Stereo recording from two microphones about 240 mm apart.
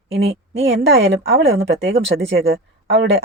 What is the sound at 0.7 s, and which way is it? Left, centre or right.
Speech, right.